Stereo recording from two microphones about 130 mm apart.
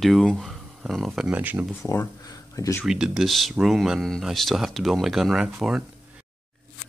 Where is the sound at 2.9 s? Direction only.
5° right (ahead or behind).